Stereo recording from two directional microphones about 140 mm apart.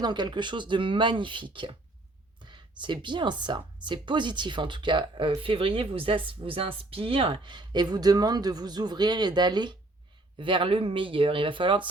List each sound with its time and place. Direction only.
0.0 s a woman's voice: 30° right (ahead or behind)